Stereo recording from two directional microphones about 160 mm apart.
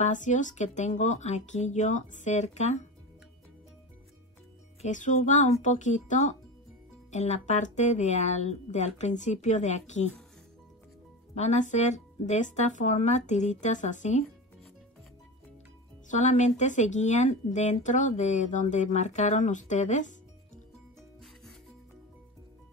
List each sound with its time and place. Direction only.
0.0 s speech: 50° left (ahead or behind)
4.8 s speech: 50° left (ahead or behind)
11.3 s speech: 45° left (ahead or behind)
16.1 s speech: 50° left (ahead or behind)